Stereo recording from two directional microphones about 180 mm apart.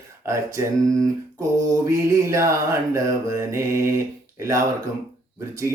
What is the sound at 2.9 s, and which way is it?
Speech, 15° right (ahead or behind).